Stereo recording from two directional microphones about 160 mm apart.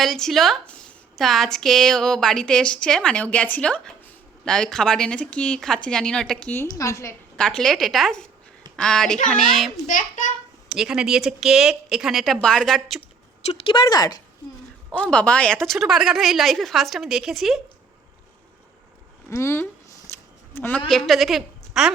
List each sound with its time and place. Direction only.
0.0 s a woman's voice: centre (ahead or behind)
6.5 s a woman's voice: 15° left (ahead or behind)
7.3 s a woman's voice: 5° left (ahead or behind)
9.8 s a child's voice: 55° left (ahead or behind)
10.7 s a woman's voice: 5° right (ahead or behind)
13.4 s speech: 40° left (ahead or behind)
13.8 s speech: 25° left (ahead or behind)
14.9 s a woman's voice: 10° left (ahead or behind)
19.3 s a woman's voice: 15° left (ahead or behind); by 21.9 s 5° right (ahead or behind)